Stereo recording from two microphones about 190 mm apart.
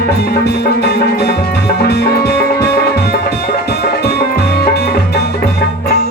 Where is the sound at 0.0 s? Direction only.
55° left (ahead or behind).